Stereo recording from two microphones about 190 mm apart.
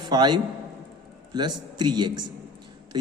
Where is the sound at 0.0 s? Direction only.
25° right (ahead or behind).